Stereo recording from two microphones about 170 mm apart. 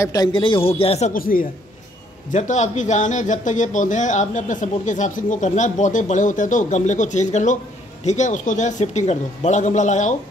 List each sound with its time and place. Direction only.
0.0 s a man's voice: 20° left (ahead or behind); by 1.1 s 35° left (ahead or behind)
1.1 s speech: 55° left (ahead or behind)
2.3 s speech: 45° left (ahead or behind)